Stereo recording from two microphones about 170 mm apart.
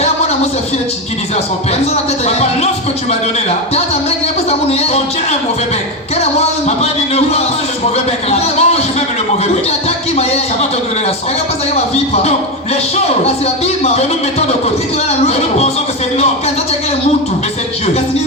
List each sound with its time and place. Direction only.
8.3 s speech: 40° left (ahead or behind)
13.8 s speech: 40° left (ahead or behind)